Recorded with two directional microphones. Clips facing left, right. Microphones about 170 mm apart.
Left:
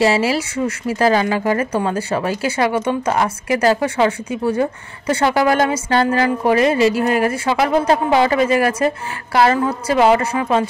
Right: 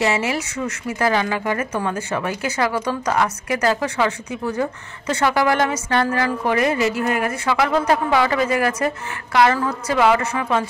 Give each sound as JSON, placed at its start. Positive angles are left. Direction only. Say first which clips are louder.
{"t": 0.0, "sound": "speech", "louder": "left 5 dB", "side_deg": 30}